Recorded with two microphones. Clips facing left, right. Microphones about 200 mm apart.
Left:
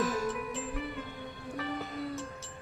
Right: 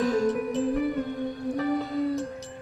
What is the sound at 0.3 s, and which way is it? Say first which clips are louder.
Music: right 10 dB; 40° right (ahead or behind).